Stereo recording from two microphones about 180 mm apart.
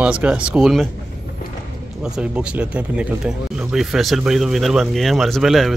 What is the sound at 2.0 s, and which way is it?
Speech, 5° right (ahead or behind).